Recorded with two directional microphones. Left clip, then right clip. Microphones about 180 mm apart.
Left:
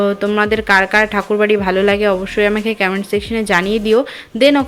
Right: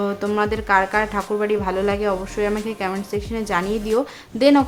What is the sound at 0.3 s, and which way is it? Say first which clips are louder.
Speech: left 5 dB; 15° left (ahead or behind).